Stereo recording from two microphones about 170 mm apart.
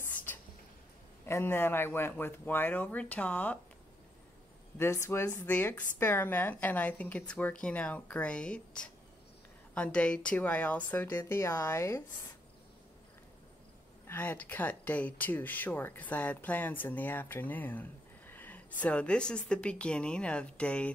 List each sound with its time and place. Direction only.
0.1 s a sound: 10° left (ahead or behind)
1.2 s speech: 15° left (ahead or behind)
4.7 s speech: 15° left (ahead or behind)
14.0 s speech: 10° left (ahead or behind)